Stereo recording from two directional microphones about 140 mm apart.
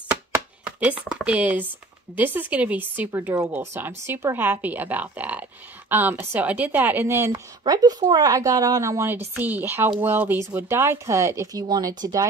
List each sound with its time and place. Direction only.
0.7 s speech: 10° right (ahead or behind); by 12.3 s 30° right (ahead or behind)